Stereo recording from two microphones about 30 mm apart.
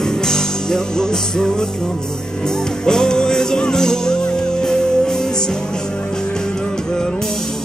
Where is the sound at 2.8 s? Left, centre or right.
Left.